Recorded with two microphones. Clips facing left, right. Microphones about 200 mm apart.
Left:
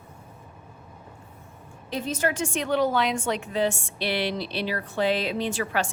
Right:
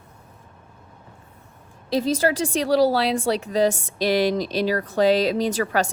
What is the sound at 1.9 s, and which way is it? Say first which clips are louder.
A woman's voice: right 7 dB; 35° right (ahead or behind).